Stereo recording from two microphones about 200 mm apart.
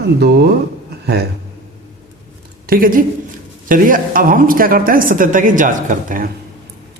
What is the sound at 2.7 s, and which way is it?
A woman's voice, 45° right (ahead or behind).